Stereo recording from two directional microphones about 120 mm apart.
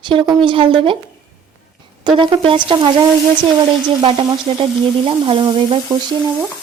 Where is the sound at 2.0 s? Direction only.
40° right (ahead or behind).